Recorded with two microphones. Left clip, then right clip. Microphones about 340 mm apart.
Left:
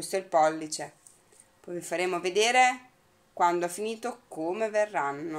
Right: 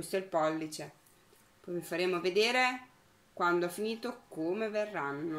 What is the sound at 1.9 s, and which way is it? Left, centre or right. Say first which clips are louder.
Speech: left 3 dB; centre.